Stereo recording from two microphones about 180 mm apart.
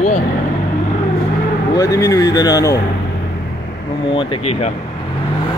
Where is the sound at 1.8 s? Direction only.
20° left (ahead or behind).